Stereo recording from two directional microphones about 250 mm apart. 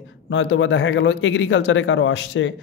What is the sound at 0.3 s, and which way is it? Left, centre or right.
Speech, left.